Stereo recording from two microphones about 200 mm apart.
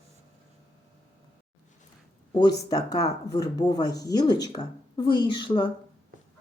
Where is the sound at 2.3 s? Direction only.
20° left (ahead or behind).